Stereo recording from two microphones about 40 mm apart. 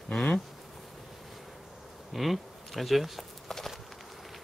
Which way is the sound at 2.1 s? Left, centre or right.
Centre.